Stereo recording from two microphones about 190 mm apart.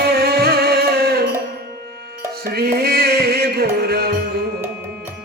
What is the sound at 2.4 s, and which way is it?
Music, 55° right (ahead or behind).